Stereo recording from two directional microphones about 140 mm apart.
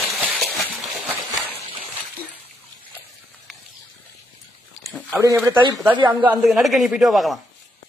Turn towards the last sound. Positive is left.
turn(degrees=0)  # may be behind; listen again after turning